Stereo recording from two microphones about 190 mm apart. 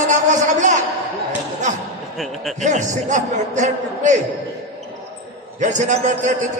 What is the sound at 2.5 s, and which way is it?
A man's voice, 40° right (ahead or behind).